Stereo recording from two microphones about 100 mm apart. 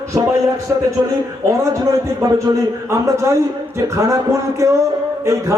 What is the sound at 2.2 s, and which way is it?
A man's voice, 35° right (ahead or behind).